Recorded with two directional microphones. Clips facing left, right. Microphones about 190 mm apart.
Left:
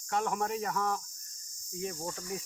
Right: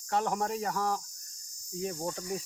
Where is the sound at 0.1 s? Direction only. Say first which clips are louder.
Right 1 dB; 35° right (ahead or behind).